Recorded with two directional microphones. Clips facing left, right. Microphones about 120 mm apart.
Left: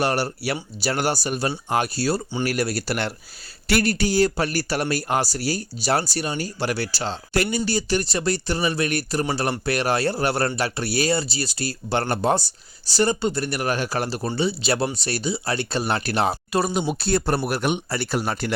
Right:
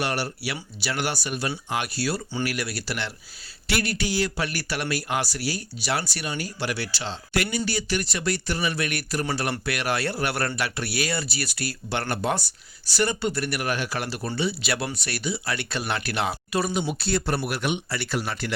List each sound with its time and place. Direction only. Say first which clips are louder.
0.0 s speech: left 5 dB; 40° left (ahead or behind)